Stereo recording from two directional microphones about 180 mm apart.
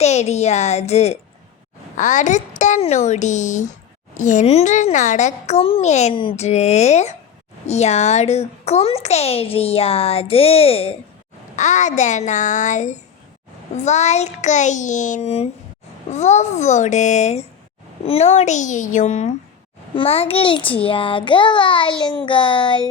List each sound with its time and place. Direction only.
0.0 s a child's voice: 40° left (ahead or behind)